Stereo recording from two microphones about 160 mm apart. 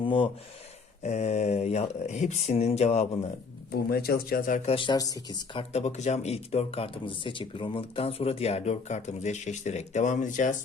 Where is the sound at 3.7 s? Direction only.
70° left (ahead or behind); by 4.7 s 55° left (ahead or behind).